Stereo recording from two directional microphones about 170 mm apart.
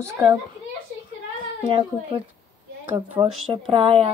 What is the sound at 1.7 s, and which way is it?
Speech, 30° right (ahead or behind).